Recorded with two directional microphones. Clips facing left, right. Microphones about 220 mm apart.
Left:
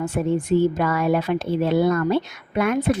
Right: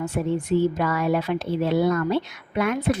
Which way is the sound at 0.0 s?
50° left (ahead or behind).